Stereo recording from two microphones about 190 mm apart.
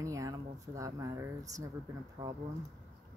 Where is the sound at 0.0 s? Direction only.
15° right (ahead or behind).